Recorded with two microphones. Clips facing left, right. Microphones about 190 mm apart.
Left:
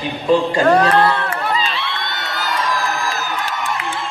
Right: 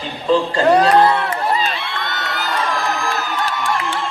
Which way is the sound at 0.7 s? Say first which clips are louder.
Right 3 dB; 15° right (ahead or behind).